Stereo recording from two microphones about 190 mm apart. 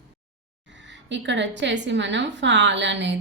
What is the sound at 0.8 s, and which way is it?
A woman's voice, 70° right (ahead or behind).